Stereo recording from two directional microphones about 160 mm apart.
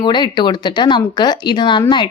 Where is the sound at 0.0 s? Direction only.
25° left (ahead or behind).